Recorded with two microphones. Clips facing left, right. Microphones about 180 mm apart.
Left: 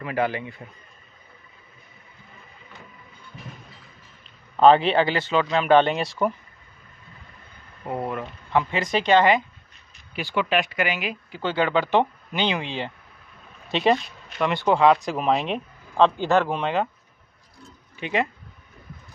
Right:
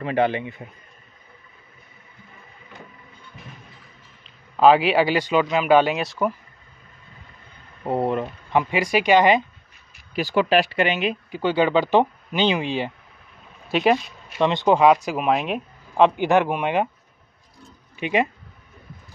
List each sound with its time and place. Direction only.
0.0 s speech: 25° right (ahead or behind)
4.2 s speech: 5° right (ahead or behind)
7.8 s speech: 30° right (ahead or behind)
10.1 s speech: 40° right (ahead or behind); by 14.4 s 5° right (ahead or behind)
14.4 s speech: 20° right (ahead or behind)
17.9 s speech: 15° right (ahead or behind)